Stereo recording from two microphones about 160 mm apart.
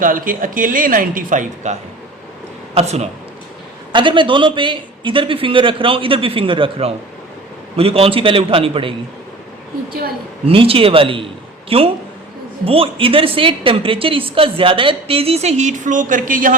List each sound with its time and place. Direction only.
0.0 s speech: 60° right (ahead or behind); by 3.1 s 45° right (ahead or behind)
3.9 s speech: 30° right (ahead or behind)
10.4 s speech: 35° right (ahead or behind); by 16.6 s 55° right (ahead or behind)